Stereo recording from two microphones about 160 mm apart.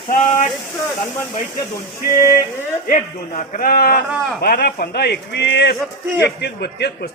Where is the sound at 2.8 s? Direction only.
55° left (ahead or behind).